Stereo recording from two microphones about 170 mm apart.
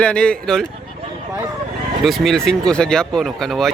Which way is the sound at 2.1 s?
Centre (ahead or behind).